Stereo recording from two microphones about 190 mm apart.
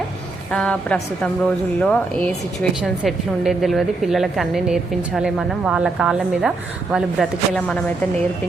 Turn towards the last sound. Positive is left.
turn(degrees=5)  # may be behind; listen again after turning